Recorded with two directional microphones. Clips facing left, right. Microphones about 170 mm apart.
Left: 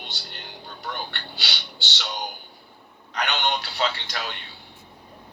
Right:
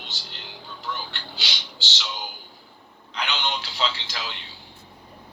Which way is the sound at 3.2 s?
55° left (ahead or behind).